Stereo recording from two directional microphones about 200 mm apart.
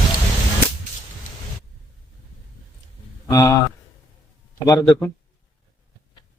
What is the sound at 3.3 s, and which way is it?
Speech, 15° left (ahead or behind).